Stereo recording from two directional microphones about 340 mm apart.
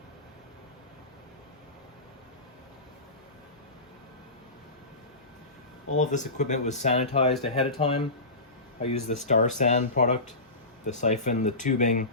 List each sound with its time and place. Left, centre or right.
6.0 s speech: left